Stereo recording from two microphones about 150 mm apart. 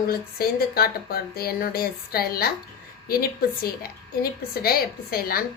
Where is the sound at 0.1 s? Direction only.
90° left.